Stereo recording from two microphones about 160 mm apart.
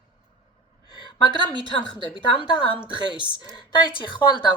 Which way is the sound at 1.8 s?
30° left (ahead or behind).